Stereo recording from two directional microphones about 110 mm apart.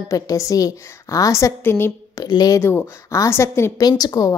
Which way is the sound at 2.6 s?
25° left (ahead or behind).